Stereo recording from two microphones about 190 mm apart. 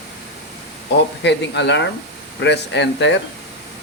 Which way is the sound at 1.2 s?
65° left (ahead or behind).